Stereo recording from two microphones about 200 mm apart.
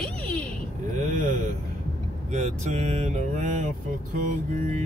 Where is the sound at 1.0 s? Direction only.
40° right (ahead or behind).